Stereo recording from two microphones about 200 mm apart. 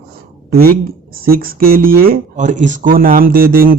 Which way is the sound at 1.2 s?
45° right (ahead or behind).